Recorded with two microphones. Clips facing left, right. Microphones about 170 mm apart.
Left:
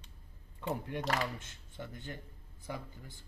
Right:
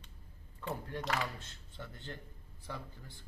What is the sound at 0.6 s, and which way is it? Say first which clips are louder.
Speech: left 3 dB; 15° left (ahead or behind).